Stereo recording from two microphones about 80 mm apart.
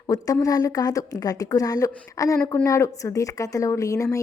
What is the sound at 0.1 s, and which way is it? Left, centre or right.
A woman's voice, left.